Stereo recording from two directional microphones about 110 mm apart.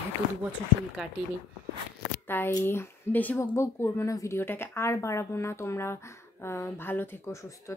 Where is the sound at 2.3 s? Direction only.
20° left (ahead or behind).